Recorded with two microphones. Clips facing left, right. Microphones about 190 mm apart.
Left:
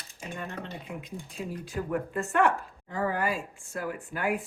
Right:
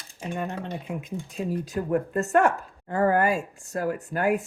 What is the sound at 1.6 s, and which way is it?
Speech, 40° right (ahead or behind).